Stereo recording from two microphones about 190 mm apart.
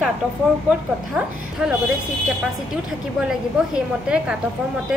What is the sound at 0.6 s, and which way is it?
A woman's voice, 5° right (ahead or behind).